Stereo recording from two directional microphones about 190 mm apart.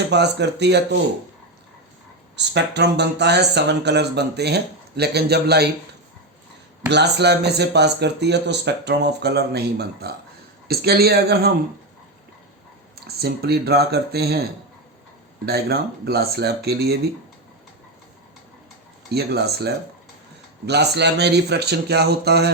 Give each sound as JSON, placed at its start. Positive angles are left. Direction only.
{"t": 0.1, "sound": "speech", "side_deg": -65}
{"t": 2.3, "sound": "speech", "side_deg": -65}
{"t": 6.9, "sound": "speech", "side_deg": -60}
{"t": 13.1, "sound": "speech", "side_deg": -55}
{"t": 15.4, "sound": "speech", "side_deg": -55}
{"t": 19.1, "sound": "speech", "side_deg": -60}